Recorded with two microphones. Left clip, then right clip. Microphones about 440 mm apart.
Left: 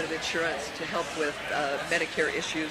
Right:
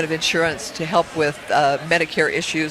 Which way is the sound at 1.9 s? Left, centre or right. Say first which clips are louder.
Right 9 dB; right.